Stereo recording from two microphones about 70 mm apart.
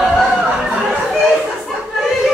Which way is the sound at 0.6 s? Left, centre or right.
Centre.